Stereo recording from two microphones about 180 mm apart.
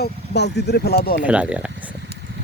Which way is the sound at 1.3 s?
5° right (ahead or behind).